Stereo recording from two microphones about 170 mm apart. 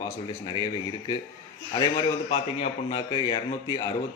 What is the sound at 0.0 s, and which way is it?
A man's voice, 25° left (ahead or behind).